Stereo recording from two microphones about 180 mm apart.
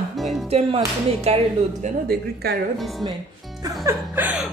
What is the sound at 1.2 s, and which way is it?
Speech, 35° right (ahead or behind).